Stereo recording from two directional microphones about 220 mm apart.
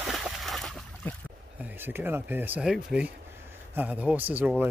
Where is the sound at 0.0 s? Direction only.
Centre (ahead or behind).